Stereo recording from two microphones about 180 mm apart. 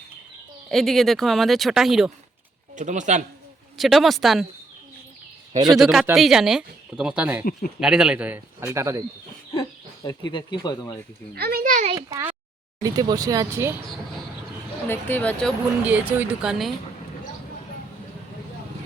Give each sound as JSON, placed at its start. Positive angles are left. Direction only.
{"t": 0.7, "sound": "speech", "side_deg": 0}
{"t": 2.7, "sound": "a child's voice", "side_deg": -45}
{"t": 3.8, "sound": "speech", "side_deg": 0}
{"t": 5.6, "sound": "speech", "side_deg": 0}
{"t": 9.6, "sound": "speech", "side_deg": 25}
{"t": 11.3, "sound": "a child's voice", "side_deg": -60}
{"t": 11.9, "sound": "speech", "side_deg": -20}
{"t": 14.8, "sound": "speech", "side_deg": 10}
{"t": 15.9, "sound": "speech", "side_deg": -10}